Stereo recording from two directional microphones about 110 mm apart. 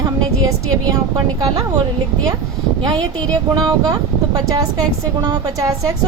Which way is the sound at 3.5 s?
35° right (ahead or behind).